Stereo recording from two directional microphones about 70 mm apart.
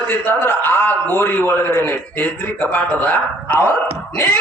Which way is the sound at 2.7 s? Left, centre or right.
Left.